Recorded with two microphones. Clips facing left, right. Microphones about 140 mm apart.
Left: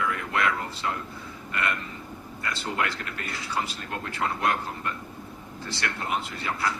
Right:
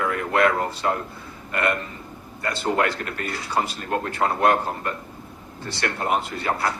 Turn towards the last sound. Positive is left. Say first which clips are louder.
# right 5 dB
turn(degrees=-50)  # may be behind; listen again after turning